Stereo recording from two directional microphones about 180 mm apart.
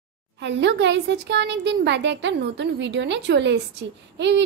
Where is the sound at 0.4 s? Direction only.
75° right (ahead or behind).